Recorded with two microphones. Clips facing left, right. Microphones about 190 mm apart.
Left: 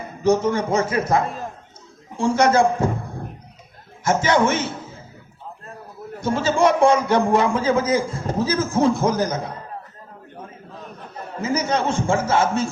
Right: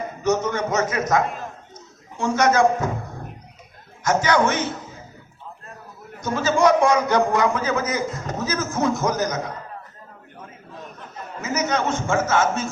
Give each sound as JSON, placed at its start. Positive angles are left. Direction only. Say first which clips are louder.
{"t": 0.2, "sound": "a man's voice", "louder": "left 4 dB", "side_deg": 30}
{"t": 4.0, "sound": "a man's voice", "louder": "left 1 dB", "side_deg": 25}
{"t": 6.1, "sound": "a man's voice", "louder": "left 1 dB", "side_deg": 30}
{"t": 11.3, "sound": "a man's voice", "louder": "left 2 dB", "side_deg": 30}